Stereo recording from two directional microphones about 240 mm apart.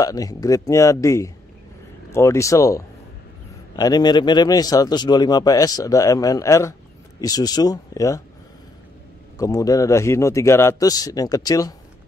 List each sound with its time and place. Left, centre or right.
0.0 s a man's voice: centre
9.4 s a man's voice: centre